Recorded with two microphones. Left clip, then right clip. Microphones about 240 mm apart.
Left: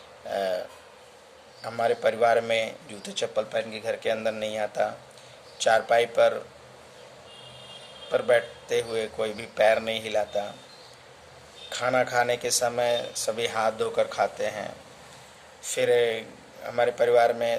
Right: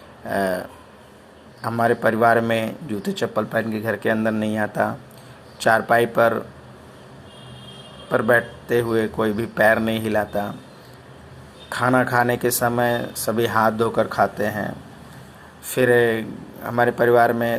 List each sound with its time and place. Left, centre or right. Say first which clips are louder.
0.3 s a man's voice: right 5 dB; centre
1.6 s a man's voice: right 5 dB; centre
8.1 s a man's voice: right 5 dB; centre
11.7 s a man's voice: right 6 dB; centre
14.3 s speech: right 5 dB; right
15.7 s a man's voice: right 6 dB; centre